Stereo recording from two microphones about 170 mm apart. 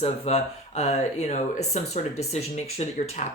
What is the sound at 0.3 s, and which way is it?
Speech, 40° left (ahead or behind).